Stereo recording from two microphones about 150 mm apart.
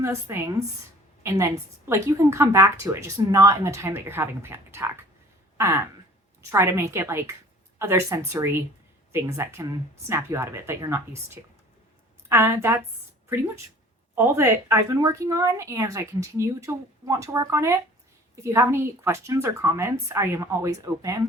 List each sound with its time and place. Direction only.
0.0 s a woman's voice: 15° right (ahead or behind)
5.5 s a sound: 20° right (ahead or behind)
6.5 s a woman's voice: 20° right (ahead or behind)
12.3 s speech: 20° right (ahead or behind)
14.2 s a woman's voice: 15° right (ahead or behind)